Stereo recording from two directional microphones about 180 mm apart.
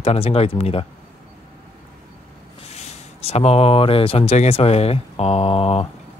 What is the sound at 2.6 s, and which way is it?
Speech, 35° left (ahead or behind).